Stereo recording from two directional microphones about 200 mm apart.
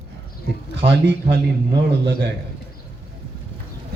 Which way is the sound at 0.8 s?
55° right (ahead or behind).